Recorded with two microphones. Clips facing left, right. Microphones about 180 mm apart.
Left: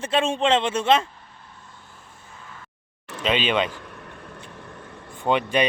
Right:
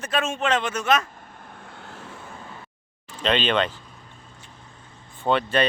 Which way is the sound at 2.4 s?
30° right (ahead or behind).